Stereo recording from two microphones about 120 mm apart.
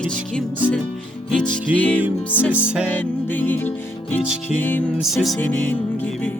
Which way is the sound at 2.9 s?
15° left (ahead or behind).